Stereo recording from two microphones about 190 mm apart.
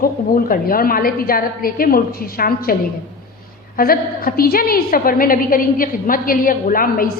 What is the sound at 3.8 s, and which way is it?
A woman's voice, 50° left (ahead or behind).